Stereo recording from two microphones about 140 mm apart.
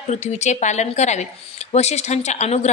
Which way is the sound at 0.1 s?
55° left (ahead or behind).